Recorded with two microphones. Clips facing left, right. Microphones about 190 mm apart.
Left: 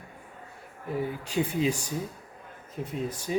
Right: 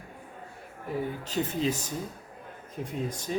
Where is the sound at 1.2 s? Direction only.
10° left (ahead or behind).